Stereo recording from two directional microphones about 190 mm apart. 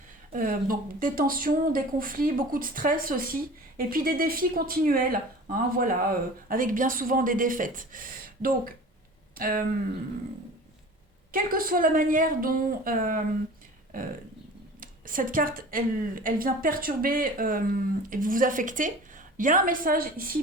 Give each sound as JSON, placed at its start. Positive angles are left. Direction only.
{"t": 0.3, "sound": "speech", "side_deg": -45}
{"t": 11.3, "sound": "speech", "side_deg": -50}
{"t": 14.8, "sound": "speech", "side_deg": -45}